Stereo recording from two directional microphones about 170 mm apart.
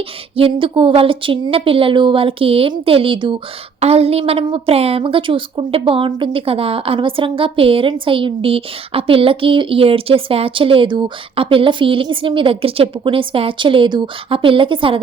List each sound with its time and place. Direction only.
0.3 s a woman's voice: 30° right (ahead or behind)